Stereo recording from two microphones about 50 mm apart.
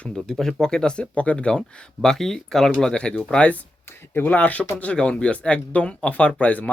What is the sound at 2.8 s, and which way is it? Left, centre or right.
Speech, centre.